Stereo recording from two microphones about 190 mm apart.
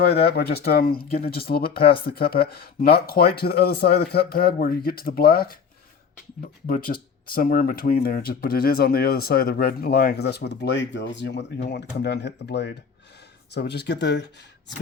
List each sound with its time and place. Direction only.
0.0 s speech: 55° left (ahead or behind)
6.7 s speech: 50° left (ahead or behind); by 14.4 s 65° left (ahead or behind)